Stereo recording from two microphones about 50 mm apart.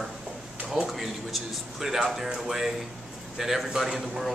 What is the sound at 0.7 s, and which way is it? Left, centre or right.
A man's voice, centre.